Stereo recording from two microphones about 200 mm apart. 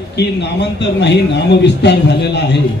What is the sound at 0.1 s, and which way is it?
A man's voice, 60° left (ahead or behind).